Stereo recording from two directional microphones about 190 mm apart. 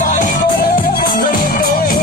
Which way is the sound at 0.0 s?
40° left (ahead or behind).